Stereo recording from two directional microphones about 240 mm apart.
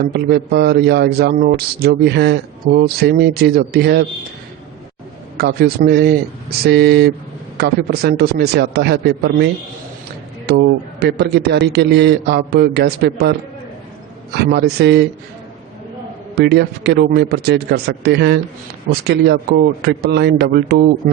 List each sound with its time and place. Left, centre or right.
0.1 s a man's voice: right
5.4 s a man's voice: right
14.3 s a man's voice: right
16.3 s a man's voice: right